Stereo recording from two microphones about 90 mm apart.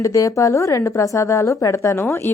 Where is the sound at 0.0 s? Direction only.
35° left (ahead or behind).